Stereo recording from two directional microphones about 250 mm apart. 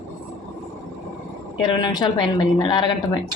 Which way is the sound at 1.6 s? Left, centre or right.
Centre.